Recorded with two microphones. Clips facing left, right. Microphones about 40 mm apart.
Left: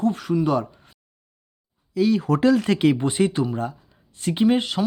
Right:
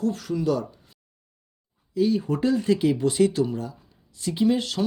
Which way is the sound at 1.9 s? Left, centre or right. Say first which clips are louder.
Left 3 dB; left.